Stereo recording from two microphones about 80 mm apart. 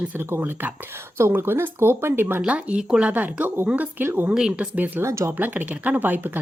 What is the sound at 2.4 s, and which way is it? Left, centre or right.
A woman's voice, centre.